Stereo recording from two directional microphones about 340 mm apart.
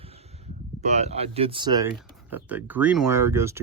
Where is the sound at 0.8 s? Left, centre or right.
Centre.